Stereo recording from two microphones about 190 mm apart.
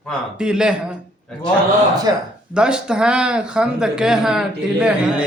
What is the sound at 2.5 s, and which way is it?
Speech, 5° right (ahead or behind).